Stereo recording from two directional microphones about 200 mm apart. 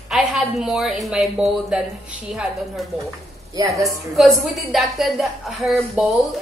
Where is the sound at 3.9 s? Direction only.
Centre (ahead or behind).